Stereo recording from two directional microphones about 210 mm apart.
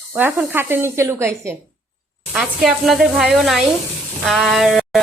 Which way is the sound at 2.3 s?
Centre (ahead or behind).